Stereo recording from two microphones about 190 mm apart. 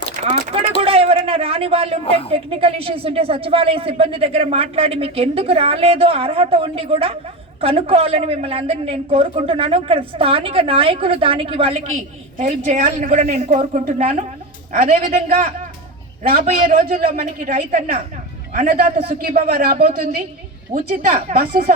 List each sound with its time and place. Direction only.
0.8 s a sound: 30° right (ahead or behind)
2.3 s a woman's voice: 30° right (ahead or behind)
16.5 s speech: 40° right (ahead or behind)